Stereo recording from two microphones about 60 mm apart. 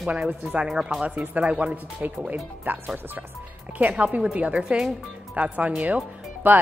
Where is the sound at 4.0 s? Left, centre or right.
Centre.